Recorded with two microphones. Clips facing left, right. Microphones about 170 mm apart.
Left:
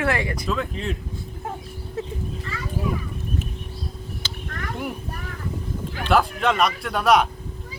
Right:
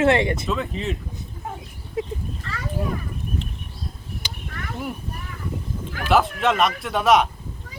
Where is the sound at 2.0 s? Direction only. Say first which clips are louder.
Right 3 dB; 15° right (ahead or behind).